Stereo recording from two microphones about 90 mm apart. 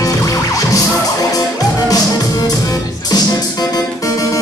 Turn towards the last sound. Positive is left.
turn(degrees=45)  # may be behind; listen again after turning